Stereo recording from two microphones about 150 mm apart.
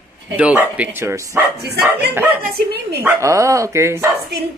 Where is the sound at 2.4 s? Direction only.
90° right.